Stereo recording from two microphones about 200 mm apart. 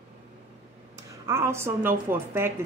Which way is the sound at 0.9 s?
15° right (ahead or behind).